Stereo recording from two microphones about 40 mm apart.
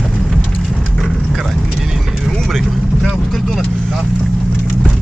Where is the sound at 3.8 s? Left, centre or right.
Centre.